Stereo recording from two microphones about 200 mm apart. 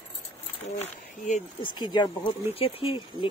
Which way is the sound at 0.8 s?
35° left (ahead or behind).